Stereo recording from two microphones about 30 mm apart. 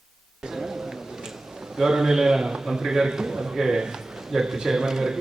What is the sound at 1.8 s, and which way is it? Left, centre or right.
A man's voice, centre.